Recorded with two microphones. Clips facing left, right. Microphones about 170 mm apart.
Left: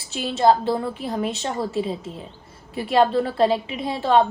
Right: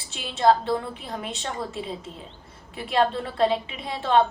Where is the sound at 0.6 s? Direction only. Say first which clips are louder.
Left 4 dB; 35° left (ahead or behind).